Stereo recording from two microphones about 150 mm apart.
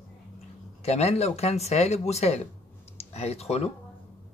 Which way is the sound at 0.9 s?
45° left (ahead or behind).